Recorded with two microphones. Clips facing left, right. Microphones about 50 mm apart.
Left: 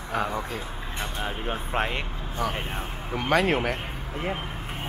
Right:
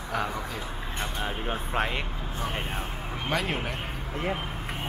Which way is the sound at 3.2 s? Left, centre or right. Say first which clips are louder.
Left 7 dB; left.